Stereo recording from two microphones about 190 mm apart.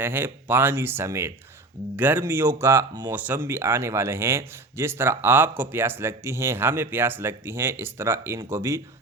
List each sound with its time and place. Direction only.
0.0 s speech: 10° right (ahead or behind)